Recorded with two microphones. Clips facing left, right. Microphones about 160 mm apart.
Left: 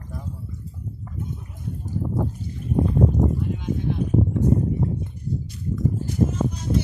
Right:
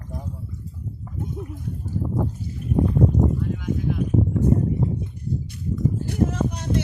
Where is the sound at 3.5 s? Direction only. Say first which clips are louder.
Right 1 dB; 25° left (ahead or behind).